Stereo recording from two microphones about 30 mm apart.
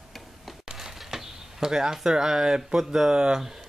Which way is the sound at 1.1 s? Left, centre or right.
Centre.